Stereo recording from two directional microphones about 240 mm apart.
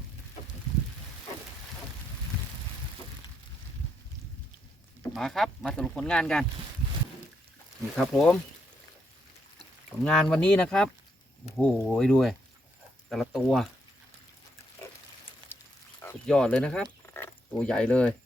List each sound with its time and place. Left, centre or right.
5.1 s speech: centre
7.9 s speech: centre
10.0 s speech: centre
15.4 s frog: centre
16.0 s speech: centre